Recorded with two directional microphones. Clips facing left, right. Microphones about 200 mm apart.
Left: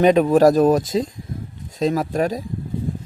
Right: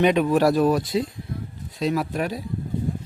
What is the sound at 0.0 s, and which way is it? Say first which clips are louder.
Speech: left 5 dB; 45° left (ahead or behind).